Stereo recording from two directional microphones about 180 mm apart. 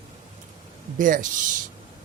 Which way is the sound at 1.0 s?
50° right (ahead or behind).